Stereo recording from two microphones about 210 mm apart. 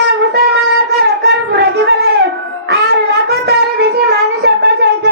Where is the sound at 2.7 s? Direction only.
50° right (ahead or behind).